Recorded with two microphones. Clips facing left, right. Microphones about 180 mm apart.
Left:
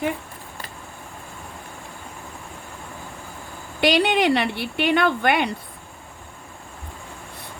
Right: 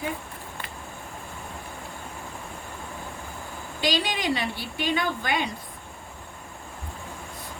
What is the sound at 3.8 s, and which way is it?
Speech, 65° left (ahead or behind).